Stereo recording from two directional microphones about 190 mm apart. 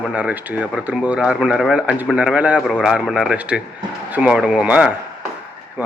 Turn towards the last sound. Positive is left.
turn(degrees=-10)  # may be behind; listen again after turning